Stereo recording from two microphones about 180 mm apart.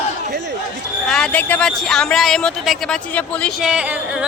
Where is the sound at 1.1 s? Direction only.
5° left (ahead or behind).